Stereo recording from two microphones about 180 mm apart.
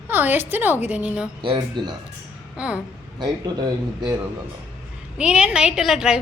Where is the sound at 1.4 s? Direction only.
25° right (ahead or behind).